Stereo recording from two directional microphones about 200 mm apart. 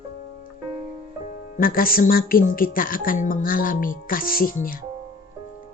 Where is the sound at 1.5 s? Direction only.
45° left (ahead or behind).